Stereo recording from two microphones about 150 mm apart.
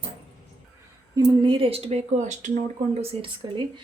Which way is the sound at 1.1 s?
30° right (ahead or behind).